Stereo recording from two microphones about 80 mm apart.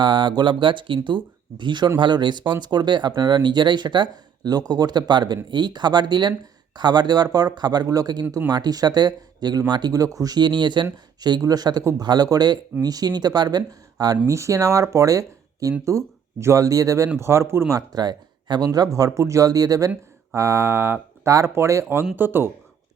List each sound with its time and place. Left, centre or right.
0.0 s speech: right
10.9 s speech: right
14.3 s speech: right
17.7 s speech: right
18.6 s speech: right
21.2 s speech: right